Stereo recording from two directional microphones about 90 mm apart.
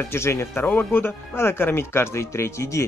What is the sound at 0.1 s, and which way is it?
Speech, 30° left (ahead or behind).